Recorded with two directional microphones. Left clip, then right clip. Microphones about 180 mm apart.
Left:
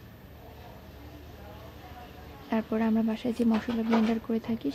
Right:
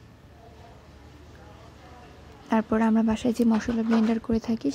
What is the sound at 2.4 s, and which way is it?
Speech, 25° right (ahead or behind).